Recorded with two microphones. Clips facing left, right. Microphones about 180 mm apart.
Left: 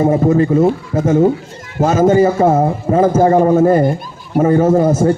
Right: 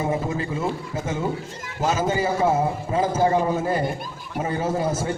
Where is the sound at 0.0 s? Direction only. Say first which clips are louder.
Left 13 dB; 45° left (ahead or behind).